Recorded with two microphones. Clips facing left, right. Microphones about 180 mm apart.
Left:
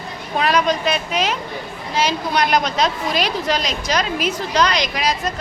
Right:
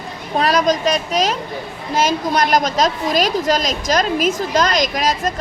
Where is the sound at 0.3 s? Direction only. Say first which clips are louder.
Right 2 dB; 40° right (ahead or behind).